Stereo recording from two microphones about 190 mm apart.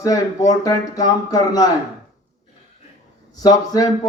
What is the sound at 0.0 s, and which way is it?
Speech, 20° left (ahead or behind).